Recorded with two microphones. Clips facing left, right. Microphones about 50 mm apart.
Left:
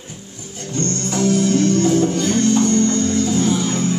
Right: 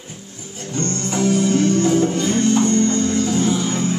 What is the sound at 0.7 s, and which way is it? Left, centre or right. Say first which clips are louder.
Music: left 1 dB; centre.